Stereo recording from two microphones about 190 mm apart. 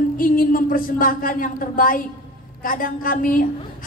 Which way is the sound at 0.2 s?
45° left (ahead or behind).